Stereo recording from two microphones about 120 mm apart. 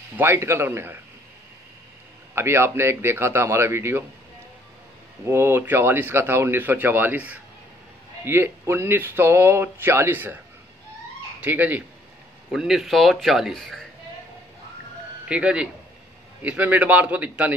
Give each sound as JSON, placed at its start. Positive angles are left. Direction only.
{"t": 0.2, "sound": "speech", "side_deg": -20}
{"t": 2.3, "sound": "speech", "side_deg": -20}
{"t": 5.2, "sound": "speech", "side_deg": -20}
{"t": 11.4, "sound": "a man's voice", "side_deg": -15}
{"t": 12.5, "sound": "speech", "side_deg": -5}
{"t": 15.2, "sound": "a man's voice", "side_deg": -10}